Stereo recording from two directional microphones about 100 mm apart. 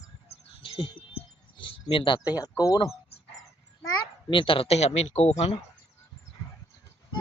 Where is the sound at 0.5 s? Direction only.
65° left (ahead or behind).